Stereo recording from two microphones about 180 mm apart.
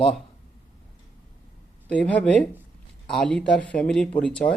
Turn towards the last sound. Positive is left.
turn(degrees=5)  # may be behind; listen again after turning